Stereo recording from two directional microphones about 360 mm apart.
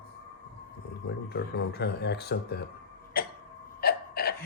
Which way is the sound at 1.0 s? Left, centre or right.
Left.